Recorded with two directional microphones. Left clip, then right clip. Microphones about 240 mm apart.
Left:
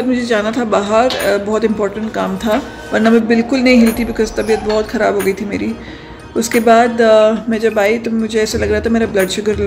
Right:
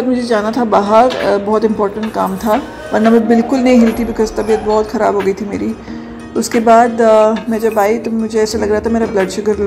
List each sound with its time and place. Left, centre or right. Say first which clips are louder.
0.6 s speech: right 6 dB; centre